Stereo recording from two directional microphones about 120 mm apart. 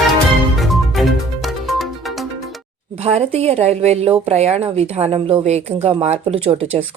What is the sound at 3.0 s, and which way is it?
Speech, 60° right (ahead or behind).